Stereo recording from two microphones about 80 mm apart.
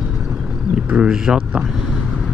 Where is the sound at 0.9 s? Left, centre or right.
Centre.